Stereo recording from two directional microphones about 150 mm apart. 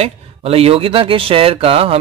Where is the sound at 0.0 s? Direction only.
40° right (ahead or behind).